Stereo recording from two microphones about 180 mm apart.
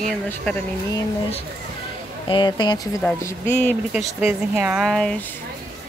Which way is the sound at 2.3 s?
25° left (ahead or behind).